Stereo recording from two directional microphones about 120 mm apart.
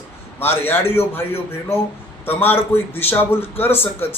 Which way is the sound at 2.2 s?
15° left (ahead or behind).